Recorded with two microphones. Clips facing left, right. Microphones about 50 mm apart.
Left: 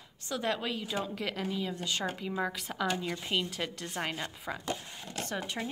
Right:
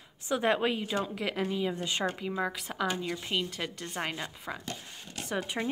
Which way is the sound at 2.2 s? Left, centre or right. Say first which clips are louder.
Right 1 dB; centre.